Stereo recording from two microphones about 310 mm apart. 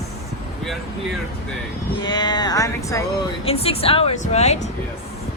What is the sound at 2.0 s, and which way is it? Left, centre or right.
Speech, centre.